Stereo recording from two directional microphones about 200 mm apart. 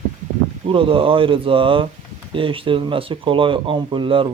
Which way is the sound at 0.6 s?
25° right (ahead or behind).